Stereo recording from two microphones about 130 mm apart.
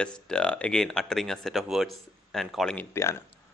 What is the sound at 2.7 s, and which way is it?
Speech, 20° left (ahead or behind).